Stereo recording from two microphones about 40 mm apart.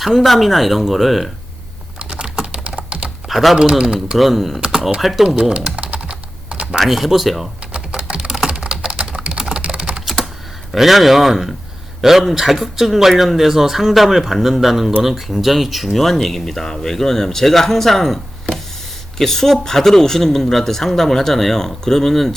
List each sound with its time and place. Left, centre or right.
0.1 s speech: centre
2.0 s typing: right
3.2 s speech: centre
3.6 s speech: right
4.2 s speech: centre
4.6 s speech: centre
5.4 s speech: centre
6.1 s computer keyboard: right
6.7 s speech: centre
7.7 s typing: right
10.7 s speech: centre